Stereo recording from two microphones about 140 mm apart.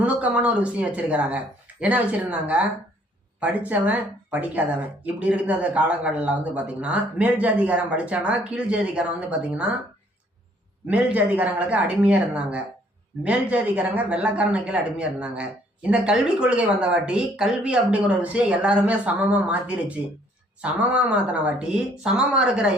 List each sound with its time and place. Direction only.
0.0 s speech: 10° right (ahead or behind)
10.8 s speech: 10° right (ahead or behind)